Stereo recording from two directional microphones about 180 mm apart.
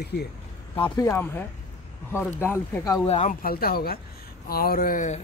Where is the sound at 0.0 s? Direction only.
65° left (ahead or behind).